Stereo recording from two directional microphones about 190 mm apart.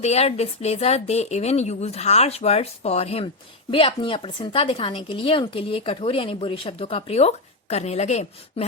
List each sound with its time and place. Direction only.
0.0 s a woman's voice: 35° left (ahead or behind)